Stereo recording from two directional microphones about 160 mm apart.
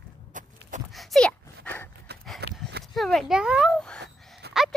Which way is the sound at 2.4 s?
90° right.